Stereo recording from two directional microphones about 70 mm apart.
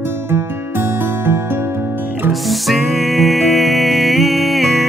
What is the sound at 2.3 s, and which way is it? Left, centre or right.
Music, centre.